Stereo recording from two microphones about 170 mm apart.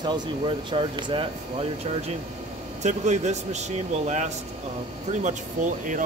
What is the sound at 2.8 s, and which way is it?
Speech, 45° right (ahead or behind).